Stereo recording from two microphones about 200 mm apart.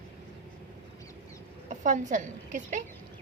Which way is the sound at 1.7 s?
40° right (ahead or behind).